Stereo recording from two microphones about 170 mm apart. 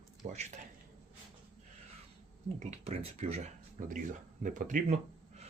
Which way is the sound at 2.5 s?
35° right (ahead or behind).